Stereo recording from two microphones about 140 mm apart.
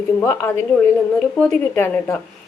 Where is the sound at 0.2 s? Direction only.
15° left (ahead or behind).